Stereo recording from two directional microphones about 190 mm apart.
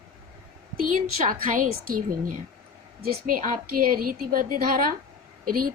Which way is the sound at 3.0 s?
50° right (ahead or behind).